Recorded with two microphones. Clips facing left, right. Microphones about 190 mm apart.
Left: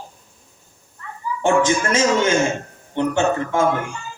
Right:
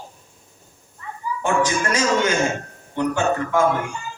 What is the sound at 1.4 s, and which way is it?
Speech, 25° left (ahead or behind).